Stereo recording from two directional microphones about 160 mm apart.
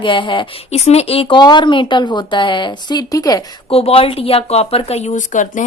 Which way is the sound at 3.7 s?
35° left (ahead or behind).